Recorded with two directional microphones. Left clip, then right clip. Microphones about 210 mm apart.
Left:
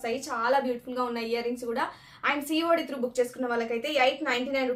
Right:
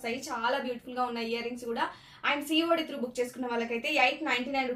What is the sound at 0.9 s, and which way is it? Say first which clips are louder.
A woman's voice: left 2 dB; 25° left (ahead or behind).